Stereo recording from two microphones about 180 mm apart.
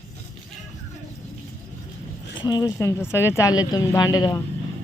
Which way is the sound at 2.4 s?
20° left (ahead or behind).